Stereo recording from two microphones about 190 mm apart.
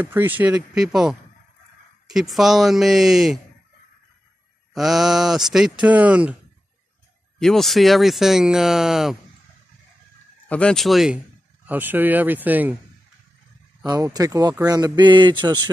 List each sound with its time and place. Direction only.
0.0 s speech: 10° right (ahead or behind)
4.7 s speech: centre (ahead or behind)
7.3 s speech: centre (ahead or behind)
10.5 s speech: 5° left (ahead or behind)
13.8 s a sound: 20° right (ahead or behind)